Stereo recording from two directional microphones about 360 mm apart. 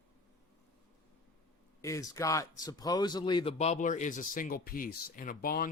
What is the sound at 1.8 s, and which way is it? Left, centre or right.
Speech, centre.